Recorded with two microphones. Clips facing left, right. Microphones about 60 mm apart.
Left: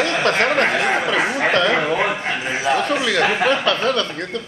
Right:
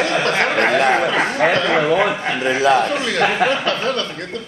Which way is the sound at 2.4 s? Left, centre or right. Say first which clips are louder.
Right 6 dB; right.